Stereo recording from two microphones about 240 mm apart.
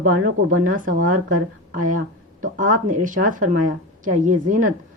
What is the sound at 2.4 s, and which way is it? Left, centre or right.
A woman's voice, right.